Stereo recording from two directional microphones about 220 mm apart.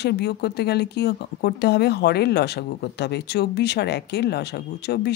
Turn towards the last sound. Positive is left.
turn(degrees=50)  # may be behind; listen again after turning